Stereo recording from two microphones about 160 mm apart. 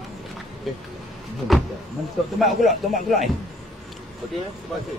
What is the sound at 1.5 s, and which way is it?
A man's voice, centre (ahead or behind).